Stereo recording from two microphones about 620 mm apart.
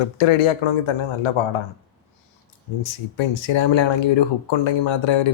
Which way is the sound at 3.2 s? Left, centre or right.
Left.